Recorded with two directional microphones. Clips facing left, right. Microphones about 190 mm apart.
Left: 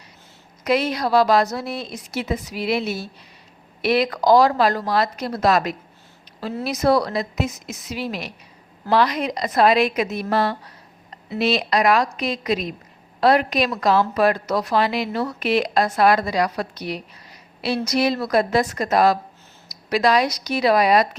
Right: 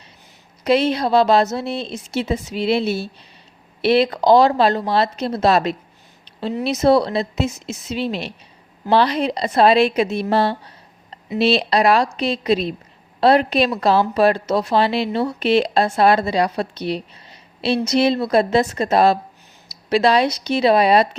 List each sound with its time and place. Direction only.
0.6 s a woman's voice: 25° right (ahead or behind)